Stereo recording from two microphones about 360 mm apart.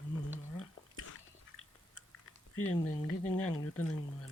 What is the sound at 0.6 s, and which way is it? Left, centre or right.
Chewing, left.